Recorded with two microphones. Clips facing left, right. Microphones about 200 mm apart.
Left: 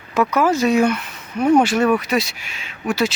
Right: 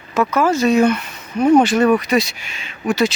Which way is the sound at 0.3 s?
15° left (ahead or behind).